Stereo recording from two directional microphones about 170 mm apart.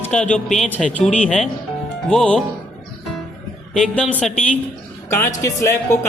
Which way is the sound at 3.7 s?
5° left (ahead or behind).